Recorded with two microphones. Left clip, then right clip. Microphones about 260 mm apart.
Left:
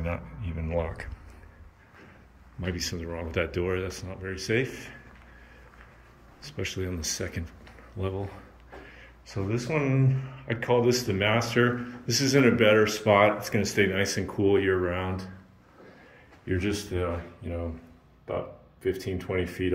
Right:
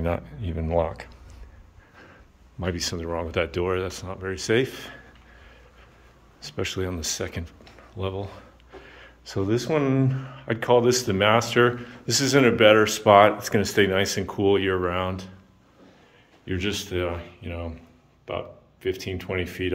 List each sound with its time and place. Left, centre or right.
0.0 s speech: right
2.6 s speech: centre
6.4 s speech: centre
8.8 s a sound: centre
9.5 s speech: right
16.4 s speech: centre